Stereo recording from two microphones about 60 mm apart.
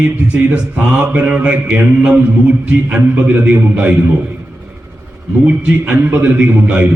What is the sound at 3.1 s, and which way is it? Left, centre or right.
Speech, right.